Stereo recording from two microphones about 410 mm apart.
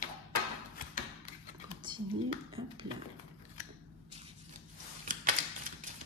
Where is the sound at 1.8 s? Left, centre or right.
Centre.